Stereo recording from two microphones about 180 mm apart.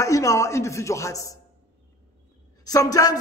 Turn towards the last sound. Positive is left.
turn(degrees=20)  # may be behind; listen again after turning